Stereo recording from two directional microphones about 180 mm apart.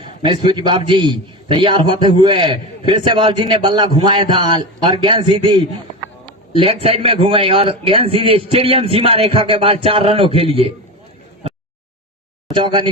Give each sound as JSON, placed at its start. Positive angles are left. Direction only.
{"t": 0.0, "sound": "a sound", "side_deg": -25}
{"t": 0.5, "sound": "a man's voice", "side_deg": -25}
{"t": 12.5, "sound": "a man's voice", "side_deg": -25}